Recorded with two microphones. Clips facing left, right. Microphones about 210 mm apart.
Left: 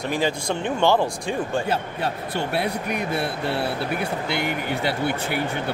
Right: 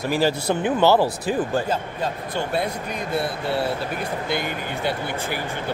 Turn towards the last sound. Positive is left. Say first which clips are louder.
# left 3 dB
turn(degrees=65)  # may be behind; listen again after turning